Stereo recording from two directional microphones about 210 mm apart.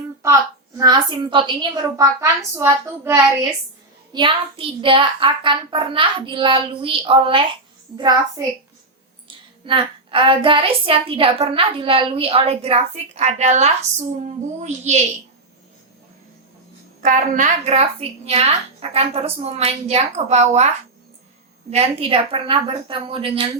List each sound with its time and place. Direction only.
0.8 s a woman's voice: 20° right (ahead or behind)
4.1 s a woman's voice: 25° right (ahead or behind)
9.2 s a woman's voice: 25° right (ahead or behind)
17.0 s a woman's voice: 40° right (ahead or behind)
21.7 s a woman's voice: 30° right (ahead or behind)